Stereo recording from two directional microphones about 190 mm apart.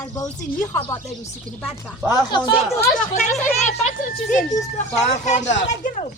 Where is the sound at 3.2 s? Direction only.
35° left (ahead or behind).